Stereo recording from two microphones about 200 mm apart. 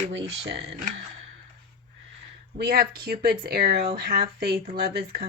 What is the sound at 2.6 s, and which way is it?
Speech, 50° right (ahead or behind).